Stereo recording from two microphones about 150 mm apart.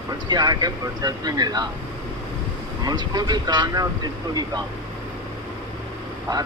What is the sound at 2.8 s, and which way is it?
Speech, 25° right (ahead or behind).